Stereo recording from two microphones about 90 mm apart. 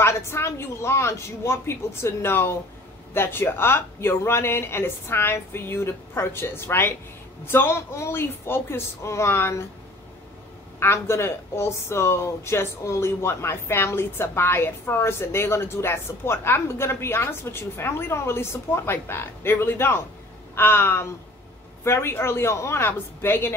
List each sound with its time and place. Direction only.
0.0 s speech: 30° left (ahead or behind)
10.8 s speech: 30° left (ahead or behind)